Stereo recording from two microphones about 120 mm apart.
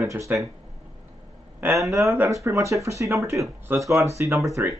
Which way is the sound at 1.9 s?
25° right (ahead or behind).